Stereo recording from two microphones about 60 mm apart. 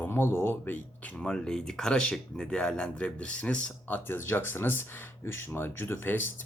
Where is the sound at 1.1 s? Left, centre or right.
Centre.